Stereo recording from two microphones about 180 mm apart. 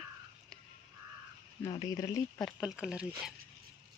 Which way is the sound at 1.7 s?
20° left (ahead or behind).